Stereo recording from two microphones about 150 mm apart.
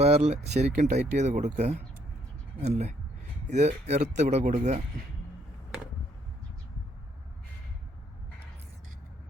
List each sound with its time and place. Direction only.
0.0 s speech: 45° right (ahead or behind)